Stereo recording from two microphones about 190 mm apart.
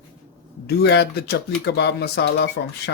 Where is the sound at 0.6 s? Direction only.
60° left (ahead or behind).